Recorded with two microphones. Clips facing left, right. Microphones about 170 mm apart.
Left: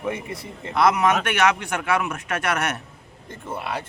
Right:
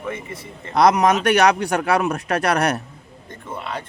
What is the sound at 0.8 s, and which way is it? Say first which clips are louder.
A man's voice: right 4 dB; 40° right (ahead or behind).